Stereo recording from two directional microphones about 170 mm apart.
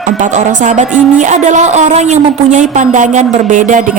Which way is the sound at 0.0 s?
45° right (ahead or behind).